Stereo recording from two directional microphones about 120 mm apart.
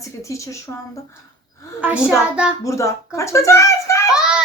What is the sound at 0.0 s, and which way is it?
Speech, 25° left (ahead or behind).